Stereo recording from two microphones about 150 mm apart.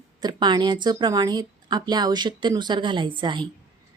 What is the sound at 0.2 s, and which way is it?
A woman's voice, 30° right (ahead or behind).